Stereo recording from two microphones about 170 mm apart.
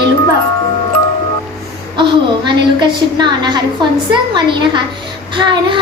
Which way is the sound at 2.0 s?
25° right (ahead or behind).